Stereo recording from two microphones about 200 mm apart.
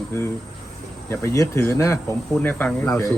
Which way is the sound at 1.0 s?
15° left (ahead or behind).